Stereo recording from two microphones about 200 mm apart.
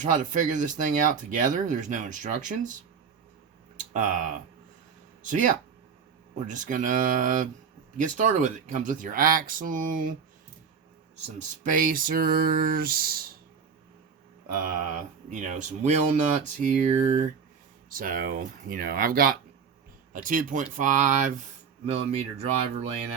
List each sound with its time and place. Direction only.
0.0 s speech: 40° right (ahead or behind)
3.8 s speech: 40° right (ahead or behind)
11.3 s a sound: 40° right (ahead or behind)
15.3 s speech: 35° right (ahead or behind)
17.8 s a sound: 45° right (ahead or behind)
20.1 s speech: 40° right (ahead or behind)